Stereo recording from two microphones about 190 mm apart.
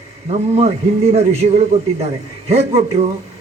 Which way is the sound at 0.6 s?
35° right (ahead or behind).